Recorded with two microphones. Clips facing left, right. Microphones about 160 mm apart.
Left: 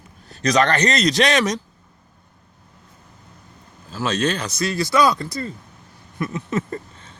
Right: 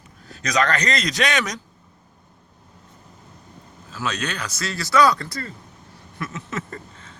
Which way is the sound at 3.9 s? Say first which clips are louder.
Left 6 dB; 30° left (ahead or behind).